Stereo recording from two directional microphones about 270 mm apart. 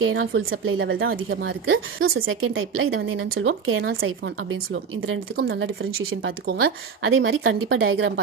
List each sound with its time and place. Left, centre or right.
0.0 s speech: right